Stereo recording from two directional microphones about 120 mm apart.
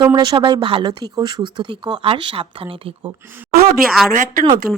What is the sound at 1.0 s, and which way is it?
Speech, 35° right (ahead or behind).